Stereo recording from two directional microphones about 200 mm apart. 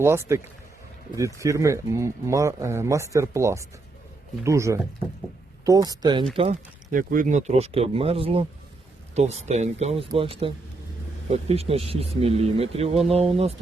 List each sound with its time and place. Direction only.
0.0 s speech: 15° right (ahead or behind); by 6.6 s 30° right (ahead or behind)
6.9 s a man's voice: 45° right (ahead or behind)